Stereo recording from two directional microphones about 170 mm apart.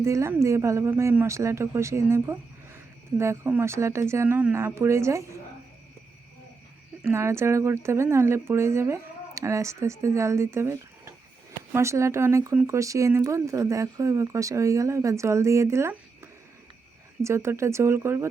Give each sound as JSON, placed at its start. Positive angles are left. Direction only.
{"t": 0.0, "sound": "a woman's voice", "side_deg": -15}
{"t": 7.0, "sound": "a woman's voice", "side_deg": -15}